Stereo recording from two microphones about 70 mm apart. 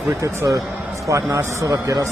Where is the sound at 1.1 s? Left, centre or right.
Right.